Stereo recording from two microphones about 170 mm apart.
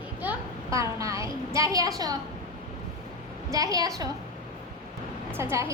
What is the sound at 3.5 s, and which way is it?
Speech, 20° right (ahead or behind).